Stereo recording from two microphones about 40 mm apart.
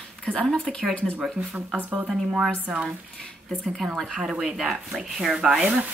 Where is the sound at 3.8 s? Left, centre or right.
Centre.